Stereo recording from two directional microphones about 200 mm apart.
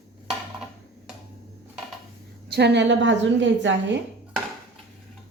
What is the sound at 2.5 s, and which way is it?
A woman's voice, 60° right (ahead or behind).